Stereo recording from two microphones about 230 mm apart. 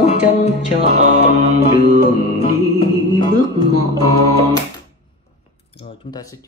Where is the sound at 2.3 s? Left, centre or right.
Left.